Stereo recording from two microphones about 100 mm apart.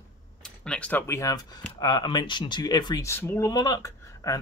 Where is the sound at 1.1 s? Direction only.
30° left (ahead or behind).